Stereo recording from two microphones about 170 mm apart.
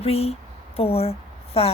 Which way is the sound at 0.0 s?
35° left (ahead or behind).